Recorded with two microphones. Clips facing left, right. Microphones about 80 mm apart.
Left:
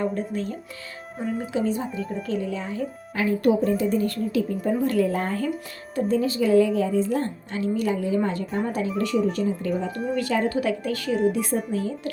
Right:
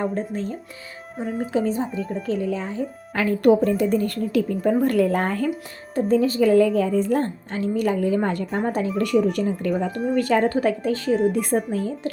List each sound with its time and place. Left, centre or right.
0.0 s speech: right
1.2 s speech: centre
1.5 s speech: right
2.0 s speech: centre
2.2 s speech: right
3.4 s a woman's voice: right
9.2 s a woman's voice: right
10.9 s a woman's voice: right
11.3 s a woman's voice: right